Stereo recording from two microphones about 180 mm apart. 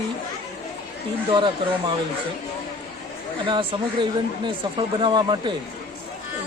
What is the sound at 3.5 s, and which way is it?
Speech, 25° right (ahead or behind).